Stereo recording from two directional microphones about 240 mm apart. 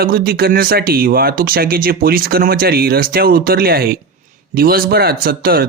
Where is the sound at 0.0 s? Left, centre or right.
Right.